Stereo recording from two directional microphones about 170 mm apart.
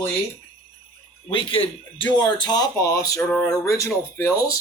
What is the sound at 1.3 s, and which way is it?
Speech, 30° left (ahead or behind).